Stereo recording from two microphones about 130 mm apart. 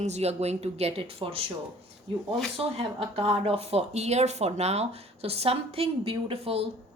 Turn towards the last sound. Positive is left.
turn(degrees=-50)  # may be behind; listen again after turning